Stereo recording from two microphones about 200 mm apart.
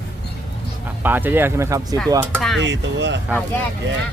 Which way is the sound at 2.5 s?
65° right (ahead or behind).